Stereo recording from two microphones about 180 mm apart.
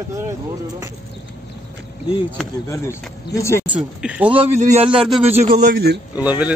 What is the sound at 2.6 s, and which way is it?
Speech, 15° left (ahead or behind).